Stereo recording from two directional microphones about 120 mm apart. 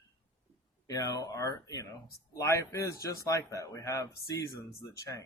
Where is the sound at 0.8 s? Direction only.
30° left (ahead or behind).